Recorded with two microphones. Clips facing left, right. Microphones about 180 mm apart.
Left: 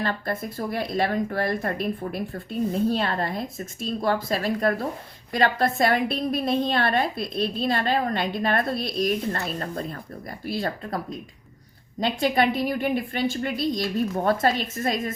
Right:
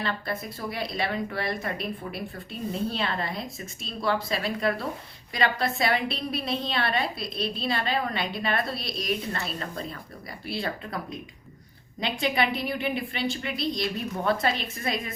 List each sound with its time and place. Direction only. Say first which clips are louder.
0.0 s speech: left 4 dB; 45° left (ahead or behind)